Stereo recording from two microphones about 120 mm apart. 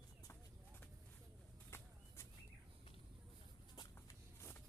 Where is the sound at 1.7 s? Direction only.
20° left (ahead or behind).